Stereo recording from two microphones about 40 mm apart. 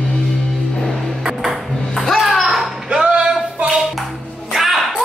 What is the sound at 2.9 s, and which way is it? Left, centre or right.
Music, right.